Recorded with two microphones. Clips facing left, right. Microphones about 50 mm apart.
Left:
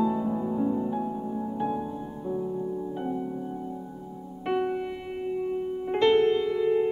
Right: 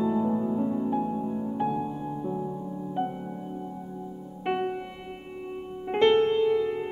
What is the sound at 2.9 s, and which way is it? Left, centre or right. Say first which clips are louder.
Music: right 1 dB; right.